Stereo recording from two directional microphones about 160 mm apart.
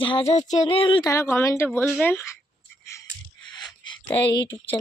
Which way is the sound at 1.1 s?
15° left (ahead or behind).